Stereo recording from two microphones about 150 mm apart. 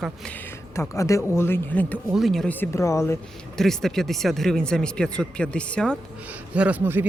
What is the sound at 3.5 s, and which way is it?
Speech, centre (ahead or behind).